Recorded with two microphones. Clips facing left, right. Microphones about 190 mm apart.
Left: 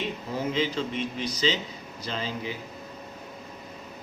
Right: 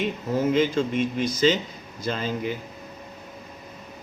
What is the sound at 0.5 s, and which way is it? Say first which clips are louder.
Speech: right 5 dB; 50° right (ahead or behind).